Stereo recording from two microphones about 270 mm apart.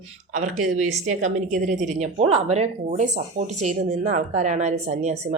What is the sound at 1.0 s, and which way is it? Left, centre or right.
A woman's voice, right.